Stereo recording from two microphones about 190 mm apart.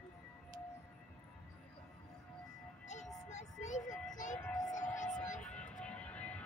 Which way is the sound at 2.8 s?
40° left (ahead or behind).